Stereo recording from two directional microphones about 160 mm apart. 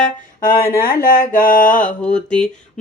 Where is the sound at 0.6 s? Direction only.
65° left (ahead or behind).